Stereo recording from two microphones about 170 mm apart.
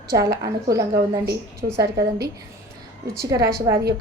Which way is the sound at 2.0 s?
75° right (ahead or behind).